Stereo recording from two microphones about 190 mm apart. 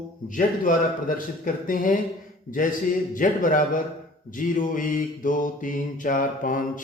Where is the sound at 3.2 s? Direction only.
45° left (ahead or behind).